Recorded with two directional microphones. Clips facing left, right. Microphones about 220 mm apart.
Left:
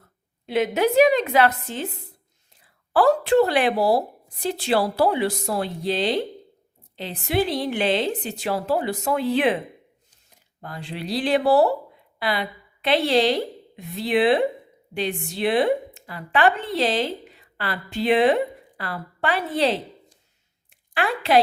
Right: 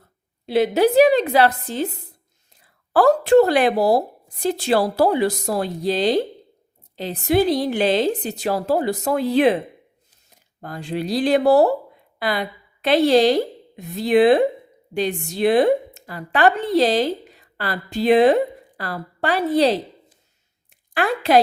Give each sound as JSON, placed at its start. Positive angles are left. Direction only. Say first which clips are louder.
{"t": 0.4, "sound": "a woman's voice", "louder": "right 4 dB", "side_deg": -35}
{"t": 10.6, "sound": "a woman's voice", "louder": "right 7 dB", "side_deg": -45}
{"t": 20.7, "sound": "a sound", "louder": "right 3 dB", "side_deg": -45}